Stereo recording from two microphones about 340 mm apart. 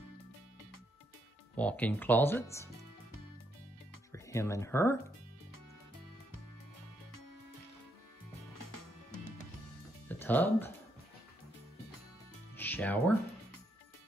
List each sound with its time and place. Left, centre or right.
1.6 s speech: centre
4.1 s speech: centre
8.5 s music: left
10.0 s speech: centre
12.5 s music: centre